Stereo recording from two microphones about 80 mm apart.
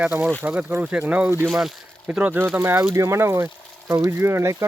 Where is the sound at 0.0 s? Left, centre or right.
Right.